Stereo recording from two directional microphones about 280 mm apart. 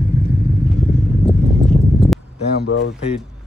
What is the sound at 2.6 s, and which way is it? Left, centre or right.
Speech, left.